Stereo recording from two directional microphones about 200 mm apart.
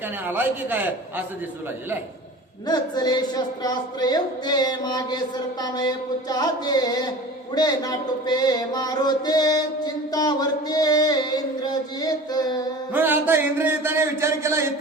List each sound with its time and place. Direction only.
0.3 s a man's voice: 10° right (ahead or behind)
2.6 s a sound: 20° left (ahead or behind)
12.9 s a man's voice: 10° right (ahead or behind)